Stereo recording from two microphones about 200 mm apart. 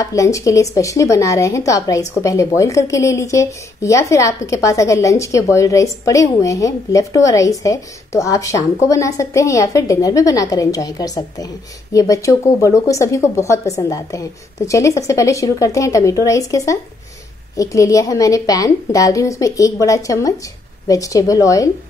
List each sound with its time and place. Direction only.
0.0 s speech: 15° left (ahead or behind)